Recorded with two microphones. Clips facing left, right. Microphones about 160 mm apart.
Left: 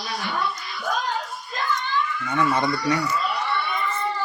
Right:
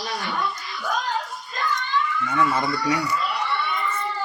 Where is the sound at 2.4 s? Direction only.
5° right (ahead or behind).